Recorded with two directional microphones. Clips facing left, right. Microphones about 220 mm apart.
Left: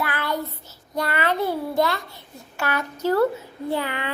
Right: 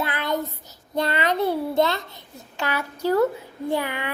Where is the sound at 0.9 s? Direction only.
20° right (ahead or behind).